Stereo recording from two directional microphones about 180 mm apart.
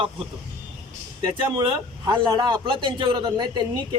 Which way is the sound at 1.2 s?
20° right (ahead or behind).